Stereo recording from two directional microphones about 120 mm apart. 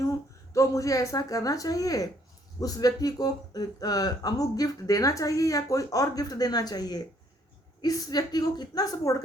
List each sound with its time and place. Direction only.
0.5 s speech: 25° left (ahead or behind)